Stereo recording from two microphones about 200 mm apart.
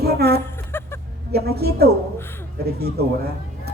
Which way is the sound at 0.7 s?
10° left (ahead or behind).